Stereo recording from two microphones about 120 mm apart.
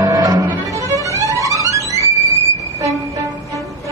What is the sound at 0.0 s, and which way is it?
Music, 30° right (ahead or behind).